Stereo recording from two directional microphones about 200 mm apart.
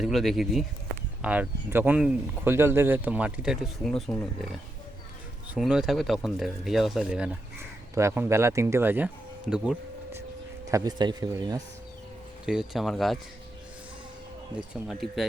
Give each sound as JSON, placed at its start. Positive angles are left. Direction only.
{"t": 0.0, "sound": "speech", "side_deg": 0}
{"t": 5.5, "sound": "speech", "side_deg": -5}
{"t": 9.5, "sound": "a sound", "side_deg": -10}
{"t": 10.7, "sound": "speech", "side_deg": -20}
{"t": 12.5, "sound": "speech", "side_deg": 0}
{"t": 14.8, "sound": "speech", "side_deg": 0}